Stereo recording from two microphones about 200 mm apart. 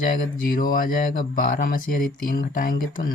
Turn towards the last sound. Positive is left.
turn(degrees=45)  # may be behind; listen again after turning